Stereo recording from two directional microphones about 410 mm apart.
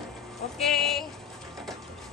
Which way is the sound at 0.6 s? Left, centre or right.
Centre.